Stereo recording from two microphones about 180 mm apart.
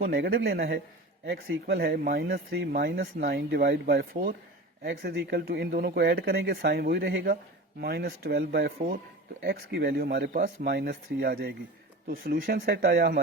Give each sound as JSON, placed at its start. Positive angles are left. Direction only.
{"t": 0.0, "sound": "speech", "side_deg": -55}